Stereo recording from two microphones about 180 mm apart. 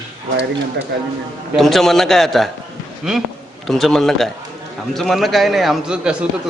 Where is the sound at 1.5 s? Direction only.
Centre (ahead or behind).